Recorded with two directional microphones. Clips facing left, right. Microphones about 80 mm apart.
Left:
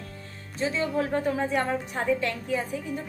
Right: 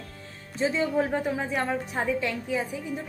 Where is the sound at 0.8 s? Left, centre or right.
Centre.